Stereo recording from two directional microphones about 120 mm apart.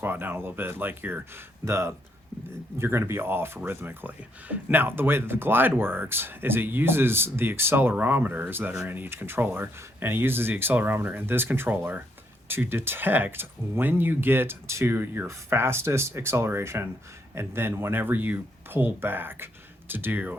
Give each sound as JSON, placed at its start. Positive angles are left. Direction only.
{"t": 0.0, "sound": "speech", "side_deg": -15}